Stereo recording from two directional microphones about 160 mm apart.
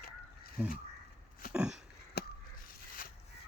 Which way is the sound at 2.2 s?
90° left.